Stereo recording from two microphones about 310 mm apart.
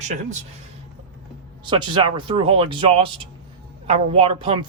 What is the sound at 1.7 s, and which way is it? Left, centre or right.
A man's voice, centre.